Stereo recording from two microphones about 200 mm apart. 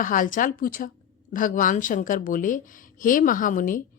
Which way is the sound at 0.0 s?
40° left (ahead or behind).